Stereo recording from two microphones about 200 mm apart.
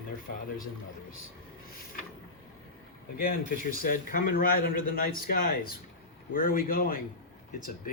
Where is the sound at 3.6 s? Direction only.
45° left (ahead or behind).